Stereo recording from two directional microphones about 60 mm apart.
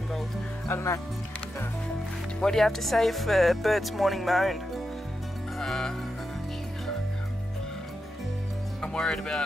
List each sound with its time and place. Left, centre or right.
0.7 s speech: left
2.4 s speech: centre
5.6 s music: centre
8.8 s speech: centre